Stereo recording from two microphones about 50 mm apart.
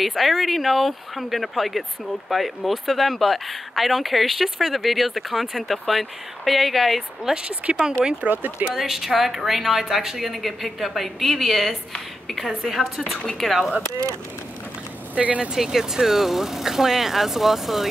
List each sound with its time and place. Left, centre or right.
0.0 s speech: centre
7.4 s speech: right
8.3 s speech: right
8.7 s speech: centre
15.1 s speech: right
15.5 s speech: centre